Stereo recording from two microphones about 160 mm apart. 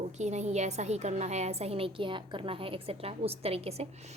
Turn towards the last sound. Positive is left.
turn(degrees=-40)  # may be behind; listen again after turning